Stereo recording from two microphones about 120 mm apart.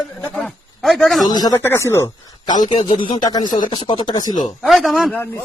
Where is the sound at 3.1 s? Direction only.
35° left (ahead or behind).